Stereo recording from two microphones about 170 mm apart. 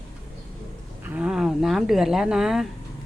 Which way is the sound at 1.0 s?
5° right (ahead or behind).